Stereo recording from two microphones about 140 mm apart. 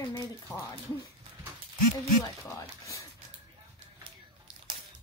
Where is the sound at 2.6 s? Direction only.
20° left (ahead or behind).